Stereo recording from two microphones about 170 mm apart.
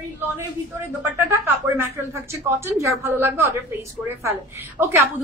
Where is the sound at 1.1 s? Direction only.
15° right (ahead or behind).